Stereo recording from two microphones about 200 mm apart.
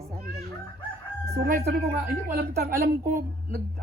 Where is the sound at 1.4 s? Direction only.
50° right (ahead or behind).